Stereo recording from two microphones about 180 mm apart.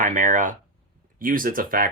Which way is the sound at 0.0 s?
45° right (ahead or behind).